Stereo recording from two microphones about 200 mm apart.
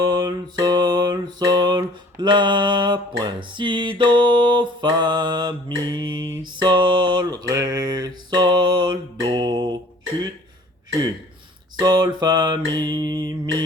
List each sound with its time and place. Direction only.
0.0 s music: 20° right (ahead or behind)
6.4 s a sound: 25° right (ahead or behind)
11.8 s music: 20° right (ahead or behind)